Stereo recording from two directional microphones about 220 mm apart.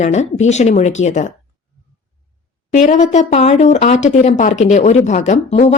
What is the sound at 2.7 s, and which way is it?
Speech, 30° left (ahead or behind).